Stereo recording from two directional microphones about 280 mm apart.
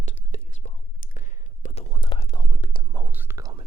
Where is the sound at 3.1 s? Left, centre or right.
Centre.